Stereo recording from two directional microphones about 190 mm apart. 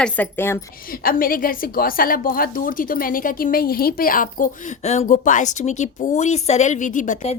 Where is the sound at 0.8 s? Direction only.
50° left (ahead or behind).